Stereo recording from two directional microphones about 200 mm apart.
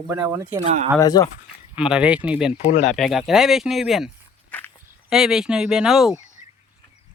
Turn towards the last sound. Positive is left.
turn(degrees=0)  # may be behind; listen again after turning